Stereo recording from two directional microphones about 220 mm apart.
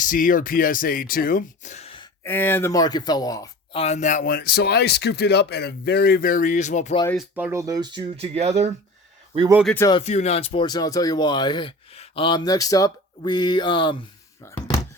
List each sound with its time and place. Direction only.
0.0 s speech: 35° left (ahead or behind)
2.2 s speech: 10° left (ahead or behind); by 7.0 s 30° left (ahead or behind)
7.2 s speech: 5° right (ahead or behind); by 8.7 s 30° right (ahead or behind)
9.6 s speech: 10° left (ahead or behind)
10.0 s speech: 30° left (ahead or behind); by 14.6 s 10° left (ahead or behind)